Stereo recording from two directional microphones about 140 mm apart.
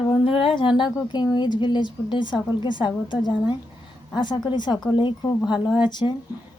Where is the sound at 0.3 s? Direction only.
40° left (ahead or behind).